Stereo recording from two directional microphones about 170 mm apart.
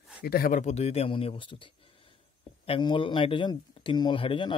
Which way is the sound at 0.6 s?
40° left (ahead or behind).